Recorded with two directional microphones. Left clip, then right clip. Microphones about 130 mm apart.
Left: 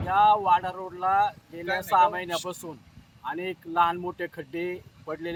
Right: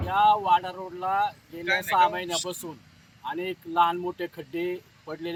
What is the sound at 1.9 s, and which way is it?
Speech, 5° left (ahead or behind).